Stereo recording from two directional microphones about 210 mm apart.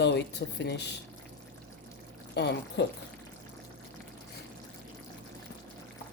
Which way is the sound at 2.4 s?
55° left (ahead or behind).